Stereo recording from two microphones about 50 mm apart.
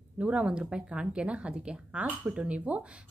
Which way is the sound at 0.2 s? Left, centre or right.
Right.